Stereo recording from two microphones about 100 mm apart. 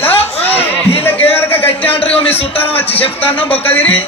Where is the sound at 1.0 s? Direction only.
20° left (ahead or behind).